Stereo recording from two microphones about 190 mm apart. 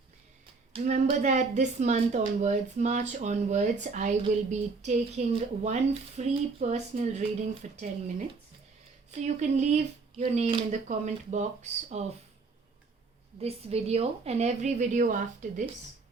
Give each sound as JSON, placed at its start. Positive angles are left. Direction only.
{"t": 0.7, "sound": "speech", "side_deg": -40}
{"t": 9.2, "sound": "speech", "side_deg": -40}
{"t": 13.4, "sound": "speech", "side_deg": -35}